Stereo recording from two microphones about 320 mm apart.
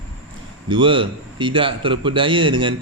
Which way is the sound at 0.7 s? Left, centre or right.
Centre.